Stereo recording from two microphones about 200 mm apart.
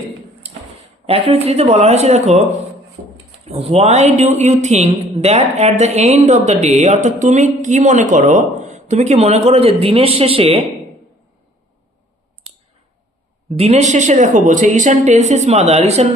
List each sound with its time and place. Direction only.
1.0 s speech: 30° right (ahead or behind)
3.4 s speech: 30° right (ahead or behind)
13.6 s speech: 35° right (ahead or behind)